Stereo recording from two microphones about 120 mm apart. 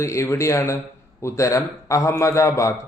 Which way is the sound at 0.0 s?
25° left (ahead or behind).